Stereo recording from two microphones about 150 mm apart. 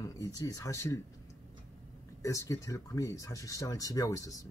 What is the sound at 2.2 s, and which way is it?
Speech, 20° left (ahead or behind).